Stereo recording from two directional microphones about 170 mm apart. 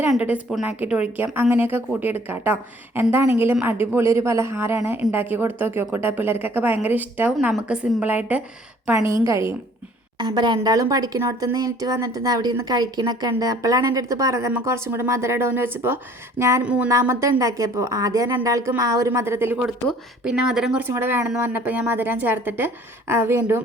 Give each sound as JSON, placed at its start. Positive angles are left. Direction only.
{"t": 0.0, "sound": "a woman's voice", "side_deg": -10}